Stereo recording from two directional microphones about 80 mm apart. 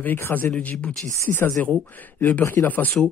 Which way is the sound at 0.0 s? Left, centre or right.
Left.